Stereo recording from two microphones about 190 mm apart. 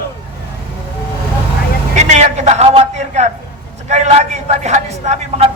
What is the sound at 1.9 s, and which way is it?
A man's voice, 35° right (ahead or behind).